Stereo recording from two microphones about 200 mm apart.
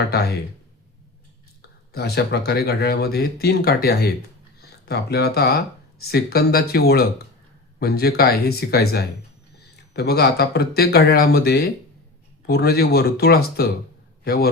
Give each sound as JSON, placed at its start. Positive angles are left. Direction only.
{"t": 0.1, "sound": "speech", "side_deg": 55}
{"t": 1.9, "sound": "speech", "side_deg": 55}